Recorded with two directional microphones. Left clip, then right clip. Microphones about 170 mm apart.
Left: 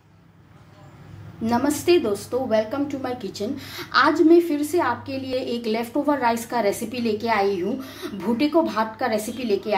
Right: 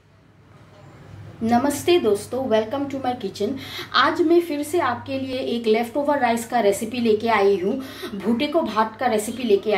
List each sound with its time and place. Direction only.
1.4 s a woman's voice: 20° left (ahead or behind)